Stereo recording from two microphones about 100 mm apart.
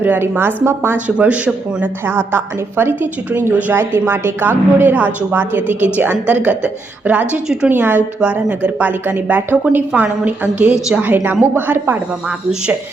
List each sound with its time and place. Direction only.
0.0 s a woman's voice: 20° right (ahead or behind)
7.7 s a woman's voice: 20° right (ahead or behind)